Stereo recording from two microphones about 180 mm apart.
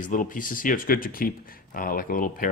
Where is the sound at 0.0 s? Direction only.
45° left (ahead or behind).